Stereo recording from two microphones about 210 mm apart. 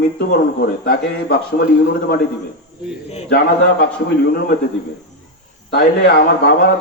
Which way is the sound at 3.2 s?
50° left (ahead or behind).